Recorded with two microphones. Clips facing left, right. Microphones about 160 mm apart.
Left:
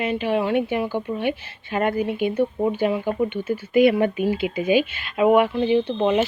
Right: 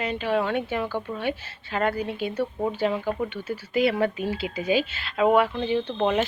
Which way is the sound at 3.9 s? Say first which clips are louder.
Left 4 dB; 10° left (ahead or behind).